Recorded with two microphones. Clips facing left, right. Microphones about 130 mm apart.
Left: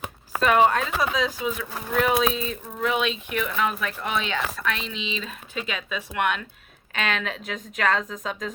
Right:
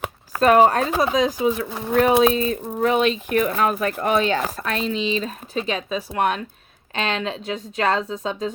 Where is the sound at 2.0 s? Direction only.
30° right (ahead or behind).